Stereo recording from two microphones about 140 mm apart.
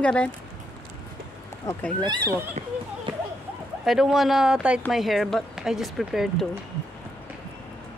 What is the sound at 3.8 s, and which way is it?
Speech, centre (ahead or behind).